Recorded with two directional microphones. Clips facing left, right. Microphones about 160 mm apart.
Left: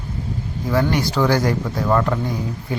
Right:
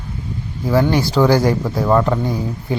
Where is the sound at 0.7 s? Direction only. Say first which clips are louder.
Right 4 dB; 30° right (ahead or behind).